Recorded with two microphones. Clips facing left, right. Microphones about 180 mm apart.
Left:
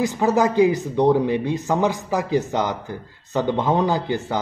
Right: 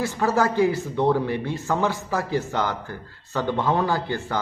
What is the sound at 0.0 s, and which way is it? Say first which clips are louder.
Speech: left 3 dB; 15° left (ahead or behind).